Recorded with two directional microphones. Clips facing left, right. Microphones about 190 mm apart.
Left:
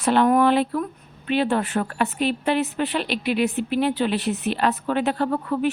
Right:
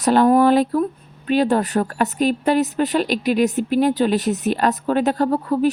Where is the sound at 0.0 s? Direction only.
40° right (ahead or behind).